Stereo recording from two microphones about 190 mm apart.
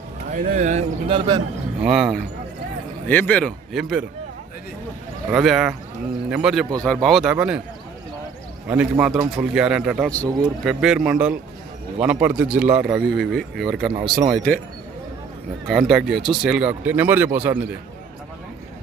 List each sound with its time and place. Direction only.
0.3 s speech: 45° right (ahead or behind); by 1.4 s 30° right (ahead or behind)
1.8 s speech: centre (ahead or behind)
3.1 s speech: 10° left (ahead or behind)
5.3 s speech: centre (ahead or behind)
8.6 s speech: 5° right (ahead or behind)
10.2 s speech: 20° right (ahead or behind)
10.6 s speech: 5° right (ahead or behind)
13.9 s speech: 25° right (ahead or behind)
14.3 s speech: 5° left (ahead or behind)
15.6 s a man's voice: centre (ahead or behind)